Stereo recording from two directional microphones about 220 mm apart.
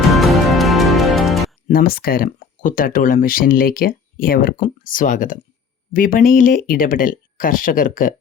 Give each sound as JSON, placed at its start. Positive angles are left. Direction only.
{"t": 0.1, "sound": "music", "side_deg": 0}
{"t": 1.6, "sound": "speech", "side_deg": 40}